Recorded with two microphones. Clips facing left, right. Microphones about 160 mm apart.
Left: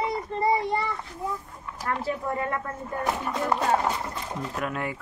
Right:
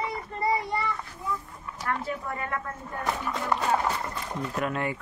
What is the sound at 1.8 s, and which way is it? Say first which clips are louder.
Speech: left 3 dB; 30° left (ahead or behind).